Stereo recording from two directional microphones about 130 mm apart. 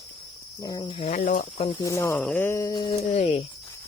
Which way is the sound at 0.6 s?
35° left (ahead or behind).